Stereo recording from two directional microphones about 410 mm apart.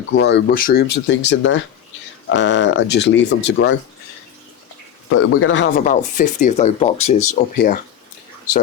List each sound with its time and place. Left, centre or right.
0.1 s speech: left
5.0 s speech: left